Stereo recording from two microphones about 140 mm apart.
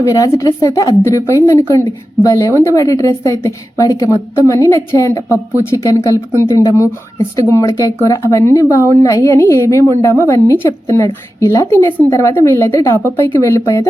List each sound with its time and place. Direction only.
0.0 s a woman's voice: 20° left (ahead or behind)
10.2 s a woman's voice: 25° right (ahead or behind)
10.6 s a woman's voice: 20° left (ahead or behind)